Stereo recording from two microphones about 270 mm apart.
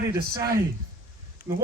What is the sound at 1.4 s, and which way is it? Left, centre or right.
Speech, left.